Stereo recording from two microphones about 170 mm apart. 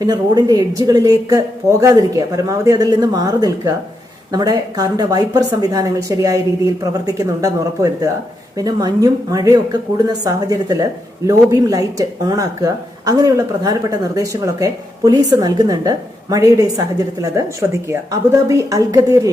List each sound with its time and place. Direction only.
0.0 s speech: 25° right (ahead or behind)